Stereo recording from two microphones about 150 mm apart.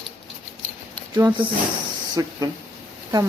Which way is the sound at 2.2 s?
25° right (ahead or behind).